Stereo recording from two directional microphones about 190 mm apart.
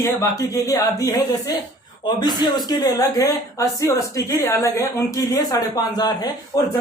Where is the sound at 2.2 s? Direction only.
20° left (ahead or behind).